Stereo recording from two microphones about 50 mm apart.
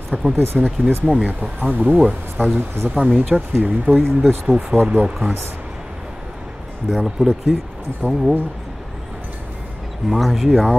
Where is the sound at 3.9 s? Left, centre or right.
Right.